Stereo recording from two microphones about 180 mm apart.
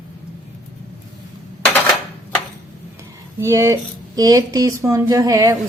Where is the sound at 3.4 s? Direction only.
15° right (ahead or behind).